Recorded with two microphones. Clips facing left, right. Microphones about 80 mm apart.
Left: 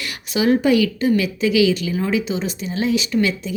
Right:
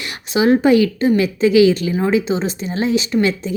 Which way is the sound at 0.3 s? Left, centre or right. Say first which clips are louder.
Right 3 dB; right.